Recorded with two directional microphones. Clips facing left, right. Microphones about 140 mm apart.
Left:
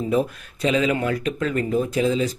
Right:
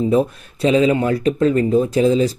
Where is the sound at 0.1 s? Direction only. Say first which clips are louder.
Right 5 dB; 30° right (ahead or behind).